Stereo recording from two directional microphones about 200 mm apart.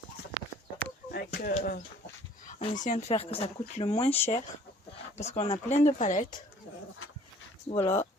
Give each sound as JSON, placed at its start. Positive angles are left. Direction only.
{"t": 1.1, "sound": "speech", "side_deg": 45}
{"t": 2.5, "sound": "speech", "side_deg": 30}
{"t": 7.7, "sound": "speech", "side_deg": 25}